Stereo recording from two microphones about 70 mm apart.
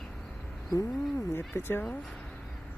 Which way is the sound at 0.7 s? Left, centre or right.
Left.